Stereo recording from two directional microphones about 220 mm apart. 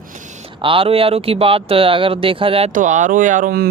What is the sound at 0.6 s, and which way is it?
Speech, 25° right (ahead or behind).